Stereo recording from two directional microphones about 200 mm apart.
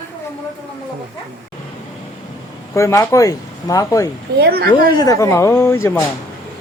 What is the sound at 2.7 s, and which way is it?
Speech, 15° left (ahead or behind).